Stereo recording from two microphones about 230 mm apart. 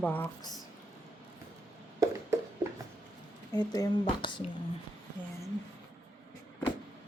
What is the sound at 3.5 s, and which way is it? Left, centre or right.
Speech, centre.